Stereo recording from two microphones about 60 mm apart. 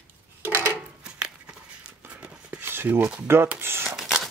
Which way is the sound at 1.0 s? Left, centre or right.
Centre.